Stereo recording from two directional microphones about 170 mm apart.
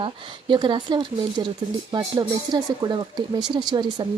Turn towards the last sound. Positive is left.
turn(degrees=-25)  # may be behind; listen again after turning